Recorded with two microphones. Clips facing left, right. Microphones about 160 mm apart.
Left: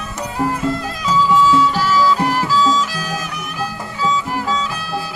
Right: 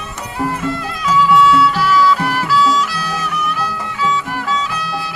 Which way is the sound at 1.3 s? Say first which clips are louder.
Right 2 dB; 40° left (ahead or behind).